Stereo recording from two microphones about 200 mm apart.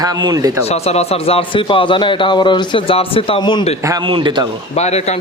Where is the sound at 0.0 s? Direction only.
20° right (ahead or behind).